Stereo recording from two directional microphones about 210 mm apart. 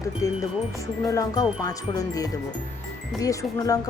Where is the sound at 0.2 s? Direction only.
15° left (ahead or behind).